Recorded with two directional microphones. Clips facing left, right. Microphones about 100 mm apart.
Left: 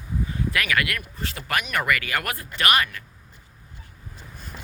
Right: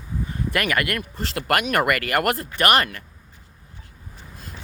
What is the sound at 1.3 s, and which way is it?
Speech, 60° right (ahead or behind).